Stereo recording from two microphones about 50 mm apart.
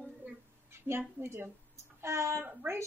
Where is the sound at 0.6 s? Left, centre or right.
Right.